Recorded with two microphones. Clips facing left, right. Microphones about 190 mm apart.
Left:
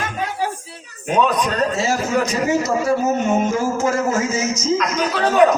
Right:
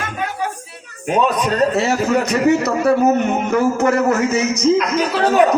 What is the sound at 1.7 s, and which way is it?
Speech, 60° right (ahead or behind).